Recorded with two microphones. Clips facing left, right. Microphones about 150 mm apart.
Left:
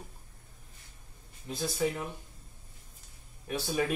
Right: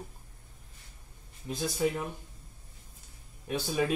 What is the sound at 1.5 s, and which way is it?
Speech, centre (ahead or behind).